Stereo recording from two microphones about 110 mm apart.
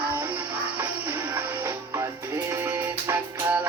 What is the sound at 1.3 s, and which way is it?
Music, 20° right (ahead or behind).